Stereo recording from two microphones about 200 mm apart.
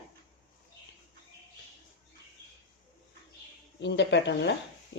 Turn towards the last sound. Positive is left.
turn(degrees=60)  # may be behind; listen again after turning